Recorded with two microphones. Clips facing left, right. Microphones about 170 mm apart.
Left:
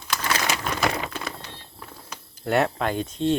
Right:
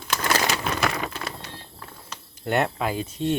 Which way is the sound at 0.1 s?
45° right (ahead or behind).